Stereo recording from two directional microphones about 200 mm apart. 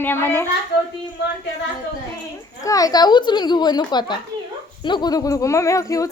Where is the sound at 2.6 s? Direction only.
15° left (ahead or behind).